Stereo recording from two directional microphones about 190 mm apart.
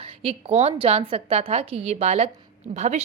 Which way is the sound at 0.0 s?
30° right (ahead or behind).